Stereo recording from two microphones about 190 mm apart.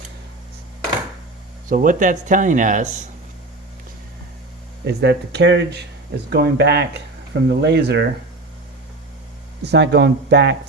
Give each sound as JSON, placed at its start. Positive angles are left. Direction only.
{"t": 1.7, "sound": "speech", "side_deg": -45}
{"t": 4.9, "sound": "speech", "side_deg": -60}
{"t": 9.6, "sound": "speech", "side_deg": -60}